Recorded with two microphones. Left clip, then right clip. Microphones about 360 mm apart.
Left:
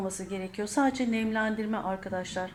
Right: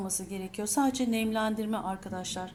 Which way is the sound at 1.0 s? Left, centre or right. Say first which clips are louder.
Even; centre.